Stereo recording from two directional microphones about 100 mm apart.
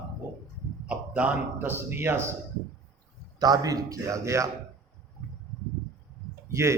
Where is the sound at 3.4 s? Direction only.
40° right (ahead or behind).